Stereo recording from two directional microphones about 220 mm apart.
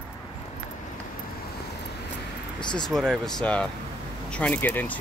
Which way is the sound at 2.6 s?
20° left (ahead or behind).